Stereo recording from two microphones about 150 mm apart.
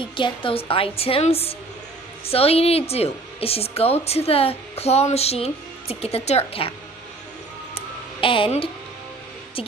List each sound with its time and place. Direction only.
0.0 s a woman's voice: 35° left (ahead or behind)
7.7 s music: 35° left (ahead or behind)